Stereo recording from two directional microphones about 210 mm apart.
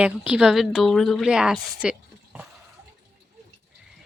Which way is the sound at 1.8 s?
5° right (ahead or behind).